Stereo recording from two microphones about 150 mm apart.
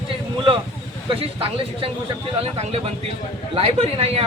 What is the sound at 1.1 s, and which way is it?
Speech, 35° right (ahead or behind).